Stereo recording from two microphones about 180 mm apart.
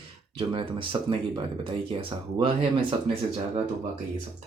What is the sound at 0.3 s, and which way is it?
Speech, 30° right (ahead or behind).